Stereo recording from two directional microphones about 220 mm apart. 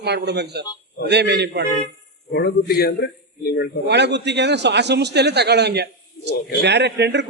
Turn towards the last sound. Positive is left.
turn(degrees=-50)  # may be behind; listen again after turning